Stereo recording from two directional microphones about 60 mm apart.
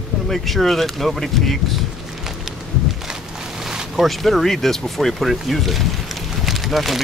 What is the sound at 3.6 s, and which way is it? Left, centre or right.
Speech, centre.